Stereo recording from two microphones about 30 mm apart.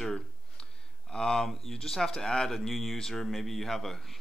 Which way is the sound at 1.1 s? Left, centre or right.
Left.